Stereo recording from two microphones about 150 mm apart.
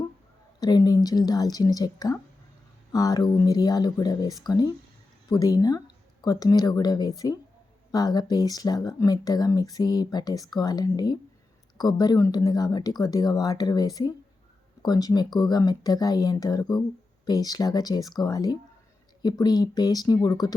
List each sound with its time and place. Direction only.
0.6 s speech: 25° left (ahead or behind)